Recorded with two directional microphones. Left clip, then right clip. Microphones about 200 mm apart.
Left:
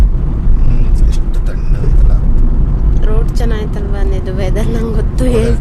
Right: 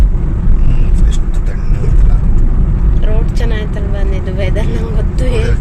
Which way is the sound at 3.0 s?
10° left (ahead or behind).